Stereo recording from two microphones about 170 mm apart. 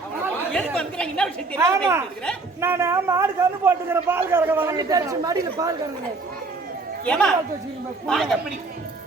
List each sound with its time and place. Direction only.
0.5 s speech: 5° left (ahead or behind)
1.5 s a man's voice: 20° right (ahead or behind)
7.0 s a woman's voice: 5° left (ahead or behind)